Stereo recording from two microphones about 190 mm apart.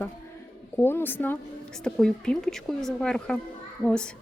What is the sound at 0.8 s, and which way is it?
A woman's voice, 10° left (ahead or behind).